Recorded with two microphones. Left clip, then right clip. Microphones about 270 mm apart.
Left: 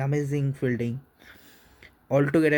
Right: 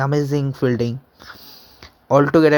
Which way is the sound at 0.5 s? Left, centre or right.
Centre.